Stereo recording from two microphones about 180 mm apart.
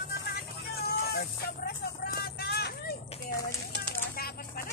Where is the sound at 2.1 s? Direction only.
60° left (ahead or behind).